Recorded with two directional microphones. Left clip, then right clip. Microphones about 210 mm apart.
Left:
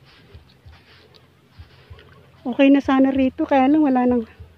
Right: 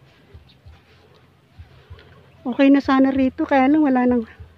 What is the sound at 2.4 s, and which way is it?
Speech, 5° right (ahead or behind).